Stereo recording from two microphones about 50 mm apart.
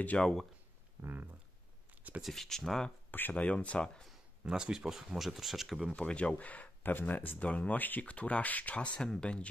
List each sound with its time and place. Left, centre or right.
0.2 s speech: centre
1.0 s speech: right
2.2 s speech: centre
3.1 s speech: left
3.4 s speech: left
4.5 s speech: centre
5.9 s speech: left